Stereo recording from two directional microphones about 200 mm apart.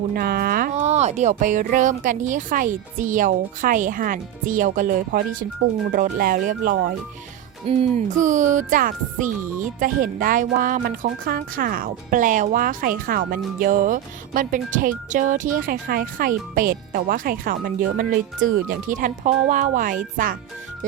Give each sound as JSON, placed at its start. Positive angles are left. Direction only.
{"t": 0.1, "sound": "speech", "side_deg": -50}
{"t": 7.7, "sound": "speech", "side_deg": -30}